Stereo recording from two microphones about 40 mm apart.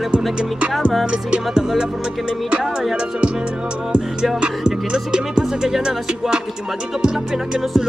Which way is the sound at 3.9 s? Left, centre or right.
Centre.